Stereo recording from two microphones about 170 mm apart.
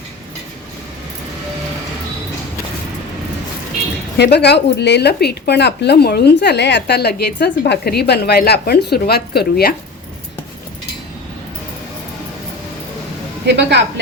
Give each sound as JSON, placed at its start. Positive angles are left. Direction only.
{"t": 4.2, "sound": "a woman's voice", "side_deg": 75}
{"t": 13.4, "sound": "a woman's voice", "side_deg": -90}